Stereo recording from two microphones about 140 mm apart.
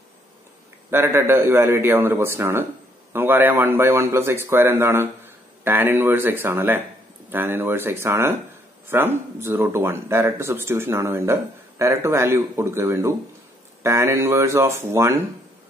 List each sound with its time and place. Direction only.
0.8 s a man's voice: 15° right (ahead or behind)